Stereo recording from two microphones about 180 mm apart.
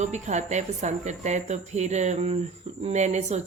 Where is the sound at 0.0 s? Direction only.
40° right (ahead or behind).